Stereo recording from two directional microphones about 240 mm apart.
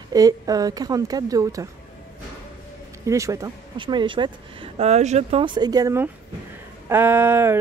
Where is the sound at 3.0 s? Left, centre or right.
Centre.